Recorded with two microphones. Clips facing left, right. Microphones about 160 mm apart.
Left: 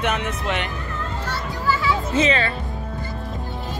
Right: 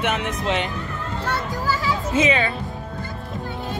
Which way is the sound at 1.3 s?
40° right (ahead or behind).